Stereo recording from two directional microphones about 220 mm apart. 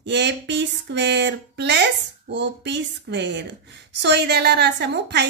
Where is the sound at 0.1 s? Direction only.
50° right (ahead or behind).